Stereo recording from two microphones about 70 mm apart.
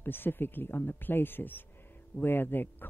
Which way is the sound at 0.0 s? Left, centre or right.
Left.